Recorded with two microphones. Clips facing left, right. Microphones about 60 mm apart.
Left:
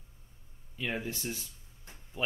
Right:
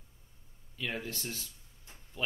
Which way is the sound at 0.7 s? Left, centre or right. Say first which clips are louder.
Left 2 dB; centre.